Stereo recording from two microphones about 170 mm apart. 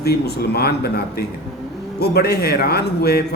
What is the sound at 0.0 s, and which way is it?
A man's voice, 70° left (ahead or behind).